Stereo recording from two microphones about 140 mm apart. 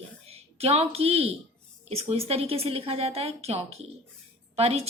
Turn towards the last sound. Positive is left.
turn(degrees=-45)  # may be behind; listen again after turning